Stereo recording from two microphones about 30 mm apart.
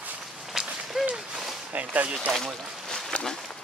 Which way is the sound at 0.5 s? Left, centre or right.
Centre.